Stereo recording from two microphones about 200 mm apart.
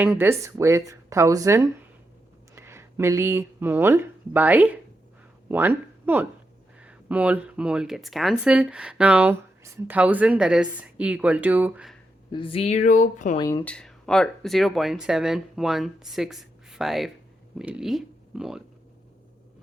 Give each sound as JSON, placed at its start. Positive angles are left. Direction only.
{"t": 0.0, "sound": "speech", "side_deg": -10}
{"t": 12.3, "sound": "speech", "side_deg": 25}
{"t": 13.4, "sound": "speech", "side_deg": 20}
{"t": 13.7, "sound": "speech", "side_deg": 5}